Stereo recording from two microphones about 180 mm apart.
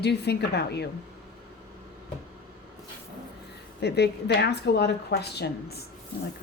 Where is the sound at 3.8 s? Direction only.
65° left (ahead or behind).